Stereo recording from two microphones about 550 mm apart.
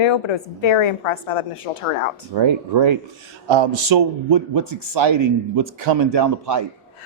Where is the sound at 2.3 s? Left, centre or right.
Right.